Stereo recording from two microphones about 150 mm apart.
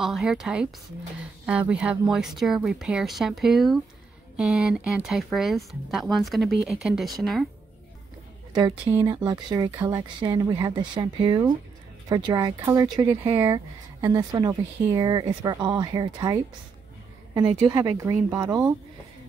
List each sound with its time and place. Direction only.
0.0 s speech: 5° right (ahead or behind)
8.5 s speech: 25° right (ahead or behind)